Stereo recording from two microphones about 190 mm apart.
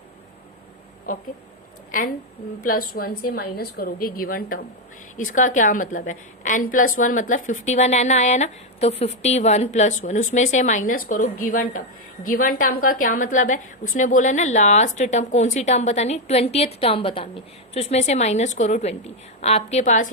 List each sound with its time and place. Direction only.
2.6 s a woman's voice: 50° left (ahead or behind)